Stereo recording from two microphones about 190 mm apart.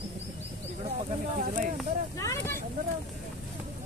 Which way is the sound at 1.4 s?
45° right (ahead or behind).